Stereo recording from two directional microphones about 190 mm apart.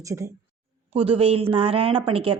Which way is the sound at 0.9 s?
30° right (ahead or behind).